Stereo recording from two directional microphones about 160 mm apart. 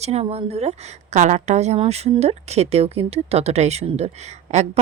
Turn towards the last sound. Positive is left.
turn(degrees=-45)  # may be behind; listen again after turning